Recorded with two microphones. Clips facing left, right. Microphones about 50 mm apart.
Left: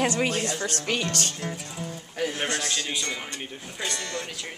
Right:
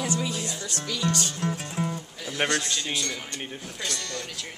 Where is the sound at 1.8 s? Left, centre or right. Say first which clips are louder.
Right 9 dB; right.